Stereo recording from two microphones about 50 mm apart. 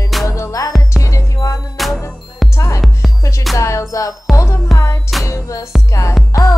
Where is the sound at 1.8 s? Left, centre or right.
Centre.